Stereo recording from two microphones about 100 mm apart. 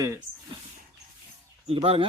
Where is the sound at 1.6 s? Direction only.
85° right.